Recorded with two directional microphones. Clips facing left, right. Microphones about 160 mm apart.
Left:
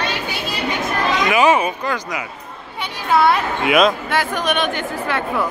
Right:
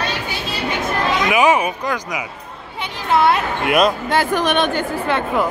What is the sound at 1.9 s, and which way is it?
Speech, 10° right (ahead or behind).